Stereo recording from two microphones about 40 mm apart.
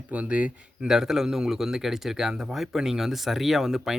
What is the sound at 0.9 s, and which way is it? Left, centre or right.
Speech, centre.